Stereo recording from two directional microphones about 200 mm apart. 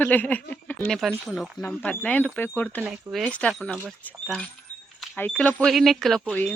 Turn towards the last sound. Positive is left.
turn(degrees=5)  # may be behind; listen again after turning